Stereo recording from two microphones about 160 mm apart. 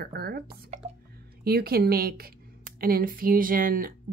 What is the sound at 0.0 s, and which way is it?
A woman's voice, 75° right (ahead or behind).